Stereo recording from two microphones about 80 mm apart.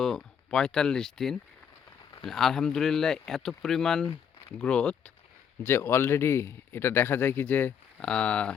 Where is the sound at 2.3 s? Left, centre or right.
Centre.